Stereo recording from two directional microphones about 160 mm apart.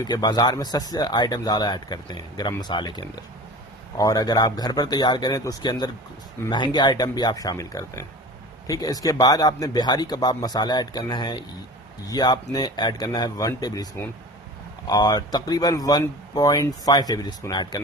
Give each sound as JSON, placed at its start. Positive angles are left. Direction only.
{"t": 0.0, "sound": "speech", "side_deg": 25}